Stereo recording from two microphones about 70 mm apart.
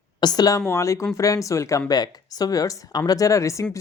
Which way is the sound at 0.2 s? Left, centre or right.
Left.